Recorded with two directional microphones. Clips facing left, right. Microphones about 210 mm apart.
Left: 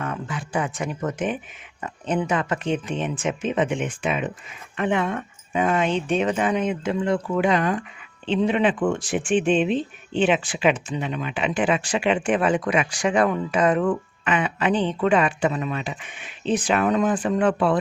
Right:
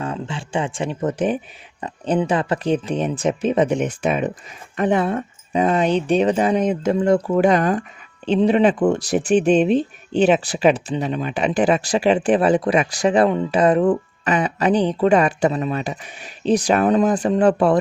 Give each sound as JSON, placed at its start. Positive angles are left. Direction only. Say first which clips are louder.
{"t": 0.0, "sound": "speech", "louder": "right 3 dB", "side_deg": -30}